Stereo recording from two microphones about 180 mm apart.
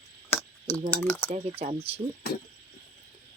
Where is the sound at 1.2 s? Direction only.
35° right (ahead or behind).